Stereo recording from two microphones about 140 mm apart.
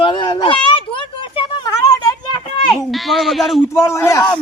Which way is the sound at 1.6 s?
25° left (ahead or behind).